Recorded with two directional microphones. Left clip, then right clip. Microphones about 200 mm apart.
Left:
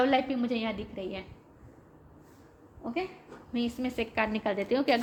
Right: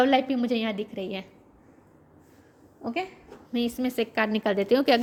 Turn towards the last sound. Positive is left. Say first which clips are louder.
# right 5 dB
turn(degrees=-45)  # may be behind; listen again after turning